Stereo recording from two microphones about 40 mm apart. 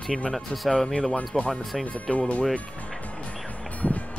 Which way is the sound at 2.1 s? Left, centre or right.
Left.